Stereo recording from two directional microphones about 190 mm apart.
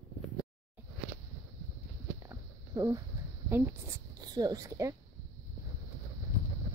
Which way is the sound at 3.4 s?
10° right (ahead or behind).